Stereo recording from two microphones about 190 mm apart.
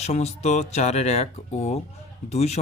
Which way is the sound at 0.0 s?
35° left (ahead or behind).